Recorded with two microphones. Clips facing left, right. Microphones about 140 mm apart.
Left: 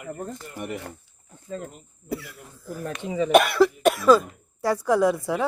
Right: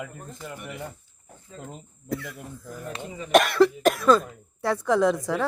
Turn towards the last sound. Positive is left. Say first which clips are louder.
# left 1 dB
turn(degrees=5)  # may be behind; listen again after turning